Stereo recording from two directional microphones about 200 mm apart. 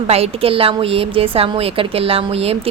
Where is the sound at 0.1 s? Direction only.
30° right (ahead or behind).